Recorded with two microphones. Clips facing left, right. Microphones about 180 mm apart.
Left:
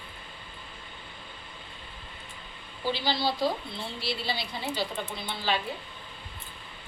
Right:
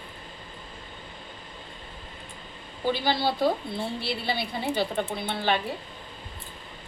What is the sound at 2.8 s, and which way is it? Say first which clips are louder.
A woman's voice: right 3 dB; 50° right (ahead or behind).